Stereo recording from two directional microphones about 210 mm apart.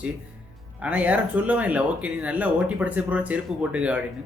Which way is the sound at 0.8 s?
5° right (ahead or behind).